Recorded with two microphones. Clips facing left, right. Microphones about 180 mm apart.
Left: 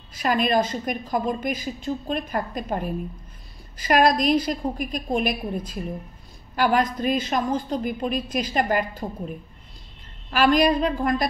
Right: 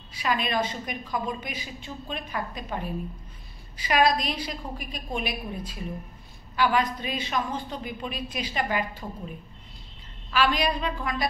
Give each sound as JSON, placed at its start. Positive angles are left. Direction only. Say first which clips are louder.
{"t": 0.2, "sound": "a woman's voice", "louder": "left 6 dB", "side_deg": 45}
{"t": 10.3, "sound": "a woman's voice", "louder": "left 6 dB", "side_deg": 45}